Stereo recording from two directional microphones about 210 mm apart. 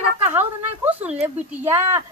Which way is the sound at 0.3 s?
10° right (ahead or behind).